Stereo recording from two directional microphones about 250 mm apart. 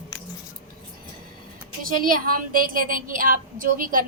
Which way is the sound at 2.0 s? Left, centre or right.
Right.